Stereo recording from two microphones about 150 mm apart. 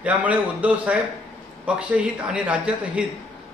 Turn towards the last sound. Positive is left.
turn(degrees=-5)  # may be behind; listen again after turning